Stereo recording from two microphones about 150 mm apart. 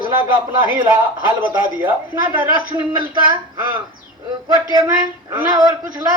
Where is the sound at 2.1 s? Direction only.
25° right (ahead or behind).